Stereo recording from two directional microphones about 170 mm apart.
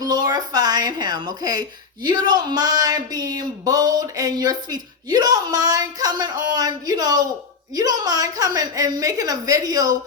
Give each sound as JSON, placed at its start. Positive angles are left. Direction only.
{"t": 0.0, "sound": "a woman's voice", "side_deg": -25}